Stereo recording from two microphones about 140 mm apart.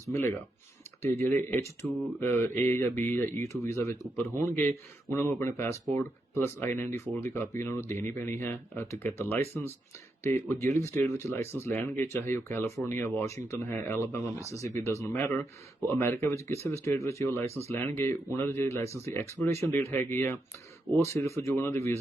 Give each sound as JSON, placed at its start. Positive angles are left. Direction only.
{"t": 0.1, "sound": "speech", "side_deg": 15}